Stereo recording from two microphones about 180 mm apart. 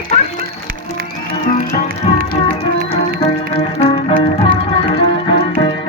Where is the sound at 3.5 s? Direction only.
30° left (ahead or behind).